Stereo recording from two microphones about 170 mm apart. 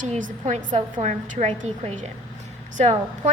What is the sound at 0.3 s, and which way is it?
A woman's voice, 45° right (ahead or behind).